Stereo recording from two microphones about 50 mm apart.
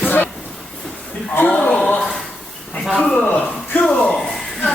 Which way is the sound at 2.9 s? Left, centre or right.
Left.